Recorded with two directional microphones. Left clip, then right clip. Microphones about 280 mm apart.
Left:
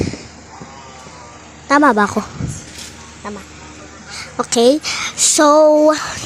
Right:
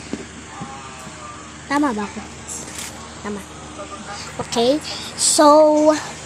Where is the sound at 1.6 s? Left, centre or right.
Left.